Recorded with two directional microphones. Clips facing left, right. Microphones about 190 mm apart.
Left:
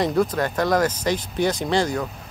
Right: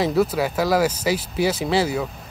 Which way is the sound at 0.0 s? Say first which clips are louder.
Right 1 dB; 5° right (ahead or behind).